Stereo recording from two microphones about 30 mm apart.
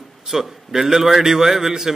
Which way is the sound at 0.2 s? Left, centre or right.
Centre.